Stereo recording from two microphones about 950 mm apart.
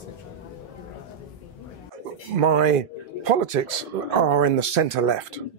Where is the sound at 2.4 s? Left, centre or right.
Right.